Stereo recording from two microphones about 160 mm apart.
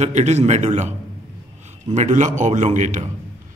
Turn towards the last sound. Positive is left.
turn(degrees=-50)  # may be behind; listen again after turning